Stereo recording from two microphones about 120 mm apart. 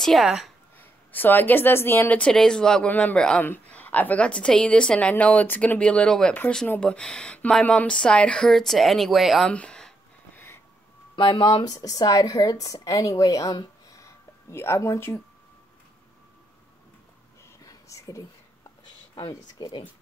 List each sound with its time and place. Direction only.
0.0 s a woman's voice: centre (ahead or behind)
0.7 s a woman's voice: 15° left (ahead or behind); by 9.5 s centre (ahead or behind)
9.5 s a sound: 10° left (ahead or behind)
10.3 s a sound: 20° left (ahead or behind)
11.1 s speech: 40° left (ahead or behind)
11.6 s a woman's voice: 30° left (ahead or behind)
17.6 s whispering: 25° left (ahead or behind)
19.1 s speech: 40° left (ahead or behind)